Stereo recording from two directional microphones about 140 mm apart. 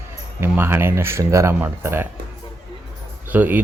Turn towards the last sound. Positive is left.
turn(degrees=-15)  # may be behind; listen again after turning